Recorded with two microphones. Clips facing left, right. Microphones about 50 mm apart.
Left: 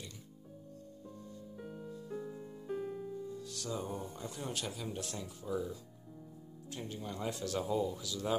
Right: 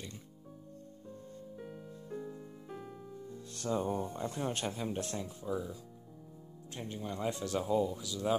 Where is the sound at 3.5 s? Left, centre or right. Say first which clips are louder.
Right 8 dB; right.